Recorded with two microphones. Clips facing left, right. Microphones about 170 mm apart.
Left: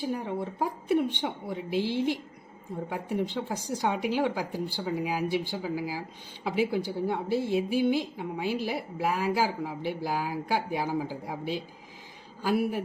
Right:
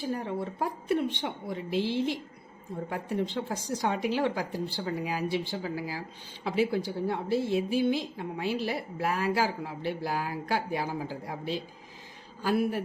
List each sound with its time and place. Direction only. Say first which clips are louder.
0.1 s a woman's voice: left 1 dB; 15° left (ahead or behind)